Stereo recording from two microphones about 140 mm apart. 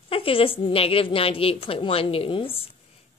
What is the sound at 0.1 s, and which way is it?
A woman's voice, 40° left (ahead or behind).